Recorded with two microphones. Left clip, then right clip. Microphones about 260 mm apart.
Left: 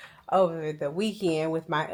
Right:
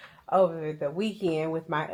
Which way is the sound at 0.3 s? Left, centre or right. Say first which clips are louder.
Even; left.